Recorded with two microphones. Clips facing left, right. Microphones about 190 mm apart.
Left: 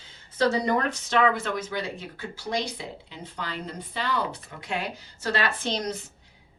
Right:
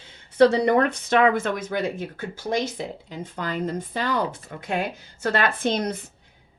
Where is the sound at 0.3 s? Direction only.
65° right (ahead or behind).